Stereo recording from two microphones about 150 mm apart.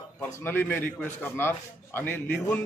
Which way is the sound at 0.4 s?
15° left (ahead or behind).